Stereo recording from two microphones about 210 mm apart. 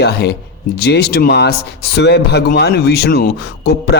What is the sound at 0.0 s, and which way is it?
Speech, 50° left (ahead or behind).